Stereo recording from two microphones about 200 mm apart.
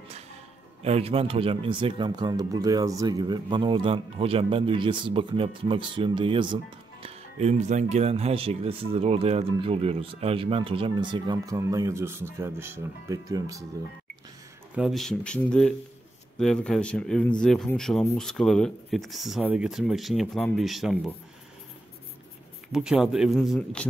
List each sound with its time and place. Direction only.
0.8 s speech: 30° right (ahead or behind)
14.8 s speech: centre (ahead or behind)
22.7 s speech: 5° right (ahead or behind)